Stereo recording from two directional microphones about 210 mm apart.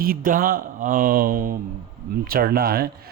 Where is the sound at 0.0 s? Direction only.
45° right (ahead or behind).